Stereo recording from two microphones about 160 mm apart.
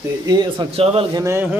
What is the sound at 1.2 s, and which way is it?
Speech, 15° right (ahead or behind).